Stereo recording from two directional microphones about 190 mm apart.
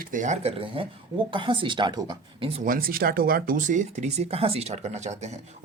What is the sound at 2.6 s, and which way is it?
Speech, 50° right (ahead or behind).